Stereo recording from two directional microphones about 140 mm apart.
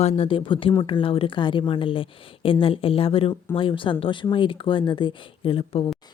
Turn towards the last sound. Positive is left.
turn(degrees=40)  # may be behind; listen again after turning